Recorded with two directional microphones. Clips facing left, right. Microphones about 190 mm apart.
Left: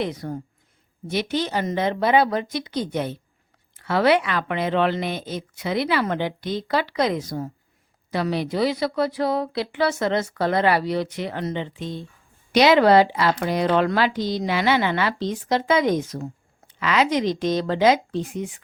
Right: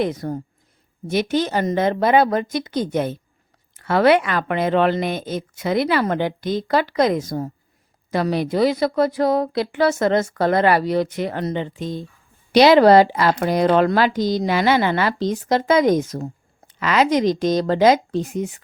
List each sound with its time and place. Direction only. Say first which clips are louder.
0.0 s a woman's voice: right 5 dB; 45° right (ahead or behind)